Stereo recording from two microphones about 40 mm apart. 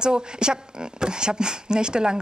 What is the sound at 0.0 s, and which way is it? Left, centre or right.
Speech, right.